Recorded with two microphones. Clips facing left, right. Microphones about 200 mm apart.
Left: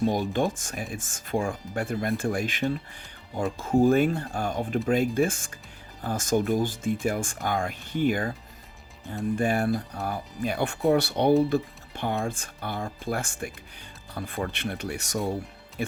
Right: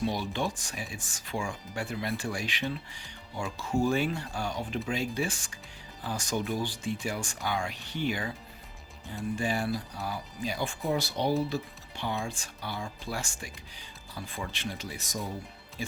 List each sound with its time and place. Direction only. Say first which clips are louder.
0.0 s speech: left 6 dB; 50° left (ahead or behind); by 15.4 s 75° left (ahead or behind)